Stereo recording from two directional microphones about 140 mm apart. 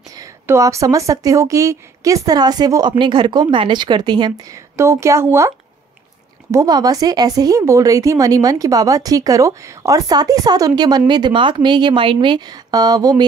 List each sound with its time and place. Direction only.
0.1 s speech: 25° right (ahead or behind)
6.5 s speech: 25° right (ahead or behind)